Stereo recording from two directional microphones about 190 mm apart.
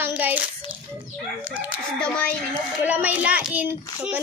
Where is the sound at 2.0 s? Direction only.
5° left (ahead or behind).